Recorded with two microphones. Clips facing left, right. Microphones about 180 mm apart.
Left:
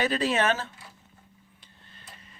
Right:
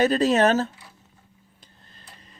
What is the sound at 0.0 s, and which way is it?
Speech, 40° right (ahead or behind).